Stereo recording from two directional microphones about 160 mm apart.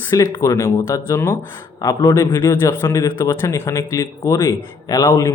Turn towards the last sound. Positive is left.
turn(degrees=20)  # may be behind; listen again after turning